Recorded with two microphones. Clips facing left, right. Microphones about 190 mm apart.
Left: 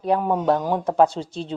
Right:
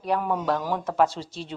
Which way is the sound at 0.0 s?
30° left (ahead or behind).